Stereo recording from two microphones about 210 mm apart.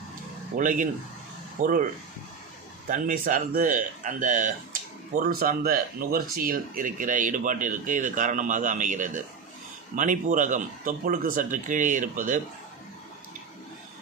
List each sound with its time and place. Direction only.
0.5 s speech: 40° right (ahead or behind)
2.8 s speech: 40° right (ahead or behind)